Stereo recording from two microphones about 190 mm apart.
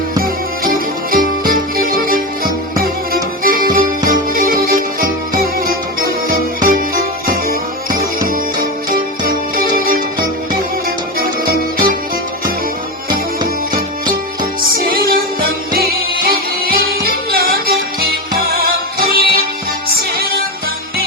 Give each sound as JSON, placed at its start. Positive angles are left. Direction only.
{"t": 0.2, "sound": "music", "side_deg": -50}
{"t": 14.8, "sound": "music", "side_deg": -50}